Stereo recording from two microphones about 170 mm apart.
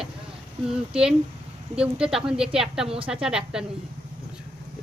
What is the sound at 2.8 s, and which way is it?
Speech, 35° right (ahead or behind).